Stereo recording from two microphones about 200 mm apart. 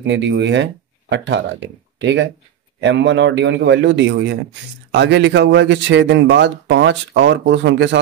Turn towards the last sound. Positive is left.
turn(degrees=-60)  # may be behind; listen again after turning